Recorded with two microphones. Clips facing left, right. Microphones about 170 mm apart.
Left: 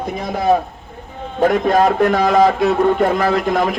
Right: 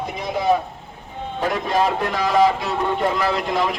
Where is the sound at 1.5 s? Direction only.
50° left (ahead or behind).